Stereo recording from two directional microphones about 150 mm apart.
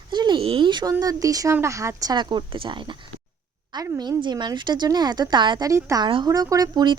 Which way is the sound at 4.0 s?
30° right (ahead or behind).